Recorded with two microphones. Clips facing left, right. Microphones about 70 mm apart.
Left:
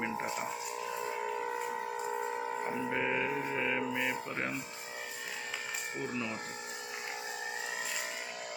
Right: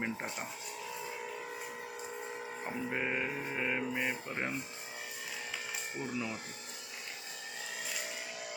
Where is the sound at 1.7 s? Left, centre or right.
Left.